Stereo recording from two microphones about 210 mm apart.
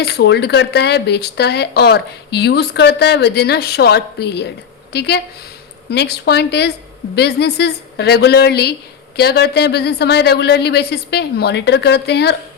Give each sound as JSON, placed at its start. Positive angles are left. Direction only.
{"t": 0.0, "sound": "speech", "side_deg": 50}